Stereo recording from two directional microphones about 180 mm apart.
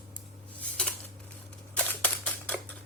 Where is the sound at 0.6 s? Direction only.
5° left (ahead or behind).